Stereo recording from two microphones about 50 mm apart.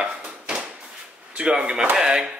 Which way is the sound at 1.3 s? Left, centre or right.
Right.